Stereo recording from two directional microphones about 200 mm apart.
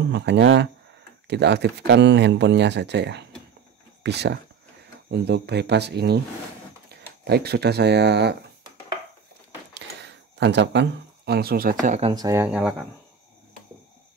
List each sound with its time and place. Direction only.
0.1 s speech: 60° right (ahead or behind)
7.2 s speech: 55° right (ahead or behind)
9.8 s speech: 60° right (ahead or behind); by 12.1 s 40° right (ahead or behind)
12.1 s speech: 15° right (ahead or behind)
12.4 s speech: centre (ahead or behind)